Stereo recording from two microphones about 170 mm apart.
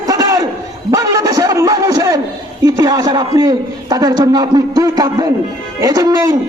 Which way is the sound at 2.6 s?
20° right (ahead or behind).